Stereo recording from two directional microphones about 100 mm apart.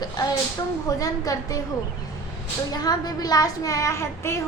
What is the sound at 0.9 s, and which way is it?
Speech, 35° left (ahead or behind).